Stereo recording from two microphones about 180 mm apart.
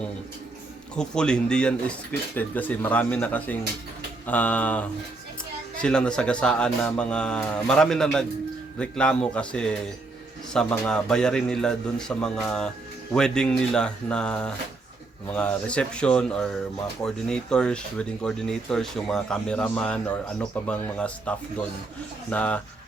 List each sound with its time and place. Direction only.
0.9 s speech: 5° left (ahead or behind)